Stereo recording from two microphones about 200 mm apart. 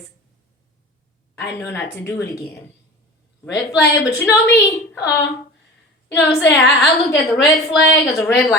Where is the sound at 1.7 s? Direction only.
10° left (ahead or behind).